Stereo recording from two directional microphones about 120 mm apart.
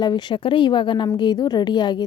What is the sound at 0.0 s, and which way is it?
Speech, 40° left (ahead or behind).